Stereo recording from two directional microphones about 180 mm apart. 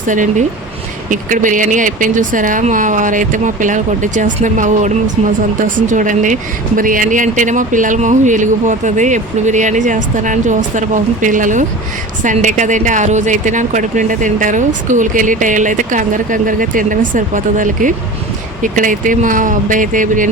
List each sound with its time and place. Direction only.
0.1 s a woman's voice: 45° right (ahead or behind)